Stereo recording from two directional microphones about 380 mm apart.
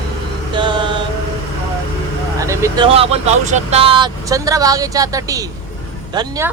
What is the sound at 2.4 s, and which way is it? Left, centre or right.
Speech, centre.